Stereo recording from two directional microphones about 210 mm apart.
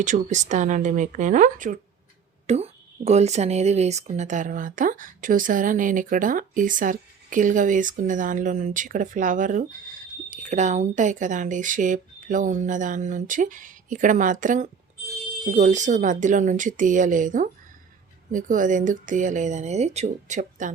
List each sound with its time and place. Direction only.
0.0 s speech: 35° right (ahead or behind)